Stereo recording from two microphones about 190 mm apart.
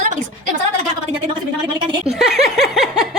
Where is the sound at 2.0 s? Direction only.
Centre (ahead or behind).